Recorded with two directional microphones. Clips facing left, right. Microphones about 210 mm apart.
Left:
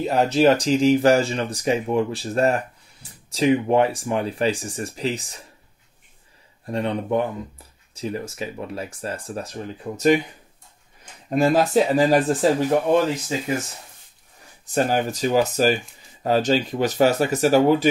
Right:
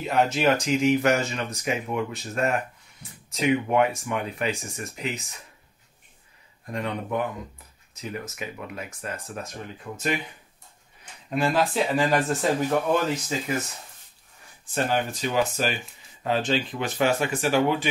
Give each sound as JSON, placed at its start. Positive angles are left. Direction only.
{"t": 0.0, "sound": "speech", "side_deg": 35}
{"t": 6.6, "sound": "speech", "side_deg": 30}
{"t": 11.2, "sound": "speech", "side_deg": 45}
{"t": 14.7, "sound": "speech", "side_deg": 40}